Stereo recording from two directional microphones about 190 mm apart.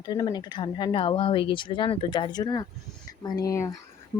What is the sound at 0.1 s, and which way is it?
Speech, 20° left (ahead or behind).